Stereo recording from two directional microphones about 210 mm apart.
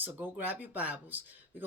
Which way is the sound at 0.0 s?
10° right (ahead or behind).